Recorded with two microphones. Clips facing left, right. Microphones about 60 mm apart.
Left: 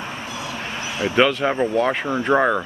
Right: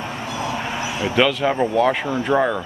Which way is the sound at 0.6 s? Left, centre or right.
Centre.